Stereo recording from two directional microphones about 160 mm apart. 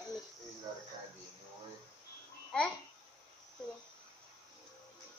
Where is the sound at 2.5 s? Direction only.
5° left (ahead or behind).